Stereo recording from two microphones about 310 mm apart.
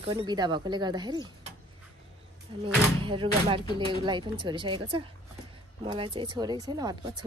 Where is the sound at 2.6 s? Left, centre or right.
Centre.